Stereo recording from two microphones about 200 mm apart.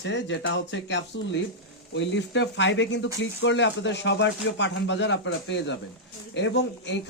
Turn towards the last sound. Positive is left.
turn(degrees=60)  # may be behind; listen again after turning